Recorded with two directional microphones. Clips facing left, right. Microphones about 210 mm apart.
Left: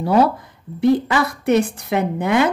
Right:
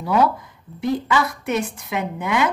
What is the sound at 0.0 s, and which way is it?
Speech, 30° left (ahead or behind).